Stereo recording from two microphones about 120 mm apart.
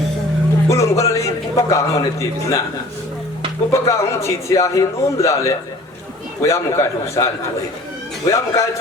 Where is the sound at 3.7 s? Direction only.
25° left (ahead or behind).